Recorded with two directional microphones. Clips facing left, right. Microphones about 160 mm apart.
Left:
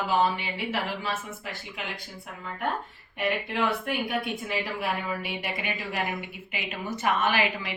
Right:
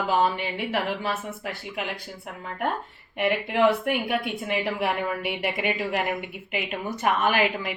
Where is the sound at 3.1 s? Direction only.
65° right (ahead or behind).